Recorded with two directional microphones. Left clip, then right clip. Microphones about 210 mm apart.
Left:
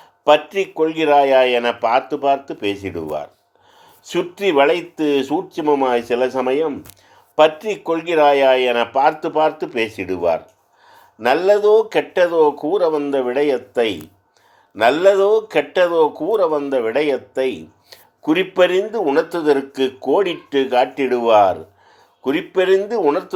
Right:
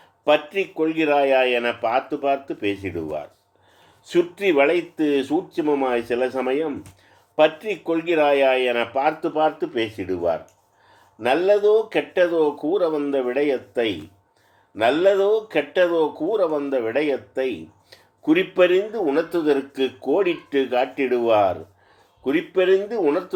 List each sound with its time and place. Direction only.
0.3 s speech: 25° left (ahead or behind)
11.2 s speech: 25° left (ahead or behind)